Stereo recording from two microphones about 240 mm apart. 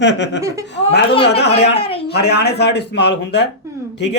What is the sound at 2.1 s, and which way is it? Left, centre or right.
Speech, left.